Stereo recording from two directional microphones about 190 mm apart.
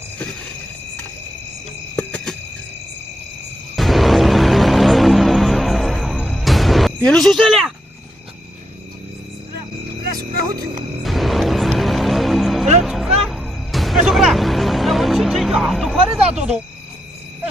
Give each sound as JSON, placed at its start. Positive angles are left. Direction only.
{"t": 2.0, "sound": "cricket", "side_deg": 5}
{"t": 3.8, "sound": "music", "side_deg": 0}
{"t": 10.0, "sound": "a sound", "side_deg": -50}
{"t": 11.0, "sound": "music", "side_deg": 0}